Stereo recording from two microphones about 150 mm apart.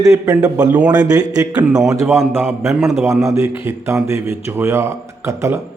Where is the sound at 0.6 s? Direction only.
10° right (ahead or behind).